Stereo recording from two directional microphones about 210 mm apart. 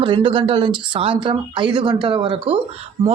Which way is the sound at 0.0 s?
25° right (ahead or behind).